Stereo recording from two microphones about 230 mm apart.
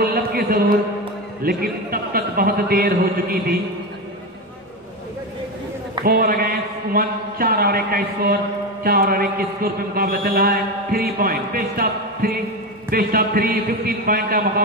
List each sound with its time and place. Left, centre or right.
0.0 s music: right
1.4 s a man's voice: right
6.0 s a man's voice: right